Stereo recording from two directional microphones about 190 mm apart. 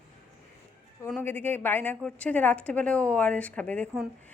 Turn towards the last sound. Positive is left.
turn(degrees=5)  # may be behind; listen again after turning